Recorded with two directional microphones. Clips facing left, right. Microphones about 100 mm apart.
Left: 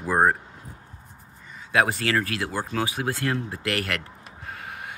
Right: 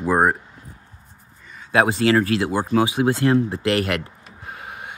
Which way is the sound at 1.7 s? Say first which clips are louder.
Right 6 dB; 20° right (ahead or behind).